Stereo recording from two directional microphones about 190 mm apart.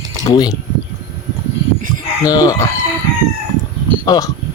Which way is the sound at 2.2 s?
20° left (ahead or behind).